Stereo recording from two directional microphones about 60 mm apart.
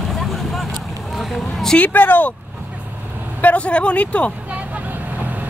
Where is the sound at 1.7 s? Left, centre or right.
Left.